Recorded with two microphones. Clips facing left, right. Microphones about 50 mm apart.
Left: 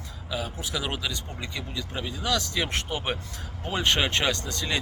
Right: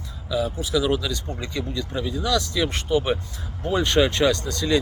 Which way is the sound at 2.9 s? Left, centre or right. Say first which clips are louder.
Right 9 dB; left.